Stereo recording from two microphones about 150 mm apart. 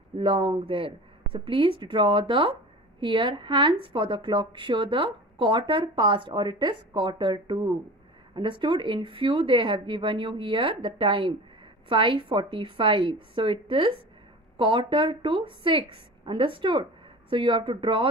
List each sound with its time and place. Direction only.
0.2 s a woman's voice: 35° right (ahead or behind)